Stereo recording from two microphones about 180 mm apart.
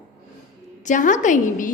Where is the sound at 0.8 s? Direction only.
45° left (ahead or behind).